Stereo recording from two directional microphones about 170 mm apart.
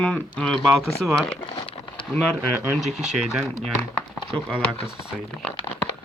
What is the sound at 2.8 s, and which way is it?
Speech, 40° right (ahead or behind).